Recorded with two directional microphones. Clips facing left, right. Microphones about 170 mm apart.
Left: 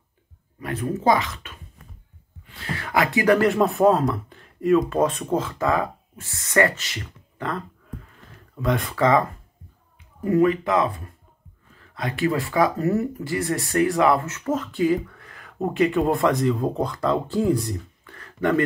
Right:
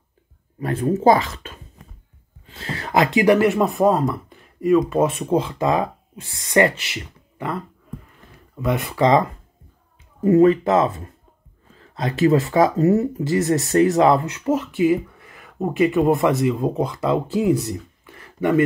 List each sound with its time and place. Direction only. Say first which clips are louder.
0.6 s speech: right 6 dB; 30° right (ahead or behind); by 3.5 s 10° right (ahead or behind)
3.5 s speech: even; centre (ahead or behind)
8.9 s speech: right 3 dB; 20° right (ahead or behind)
10.2 s speech: right 5 dB; 25° right (ahead or behind)
11.7 s a sound: right 4 dB; 30° right (ahead or behind)
12.5 s speech: right 5 dB; 25° right (ahead or behind)
18.0 s a sound: right 2 dB; 10° right (ahead or behind)